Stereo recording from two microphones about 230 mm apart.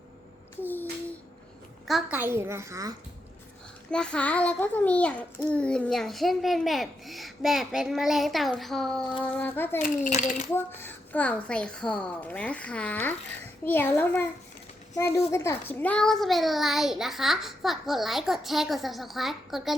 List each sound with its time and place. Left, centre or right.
1.9 s a child's voice: centre
3.9 s a child's voice: centre
10.0 s a child's voice: left
10.5 s a child's voice: centre